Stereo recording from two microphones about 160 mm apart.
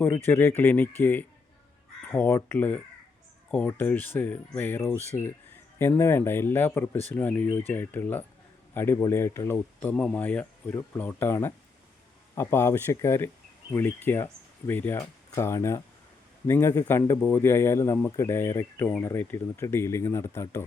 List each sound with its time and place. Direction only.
0.3 s a man's voice: 15° left (ahead or behind)
9.9 s a man's voice: 5° left (ahead or behind)